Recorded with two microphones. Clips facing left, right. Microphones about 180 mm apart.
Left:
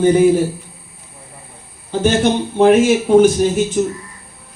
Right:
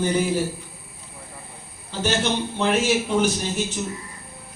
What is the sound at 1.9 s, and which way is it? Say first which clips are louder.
A man's voice: left 9 dB; 50° left (ahead or behind).